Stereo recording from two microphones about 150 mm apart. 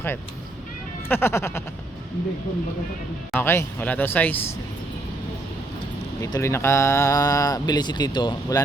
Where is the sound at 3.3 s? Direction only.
15° left (ahead or behind).